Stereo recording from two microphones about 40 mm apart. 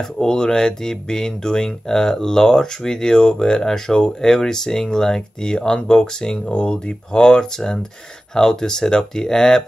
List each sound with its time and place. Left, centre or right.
0.2 s speech: centre